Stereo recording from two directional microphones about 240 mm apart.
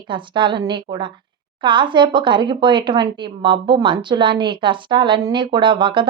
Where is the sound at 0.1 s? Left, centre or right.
Centre.